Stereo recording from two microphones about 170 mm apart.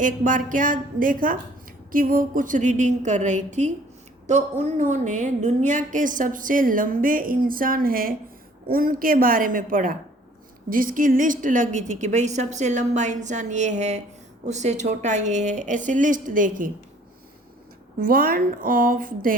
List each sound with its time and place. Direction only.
0.0 s a woman's voice: 50° right (ahead or behind)
18.0 s a woman's voice: 60° right (ahead or behind)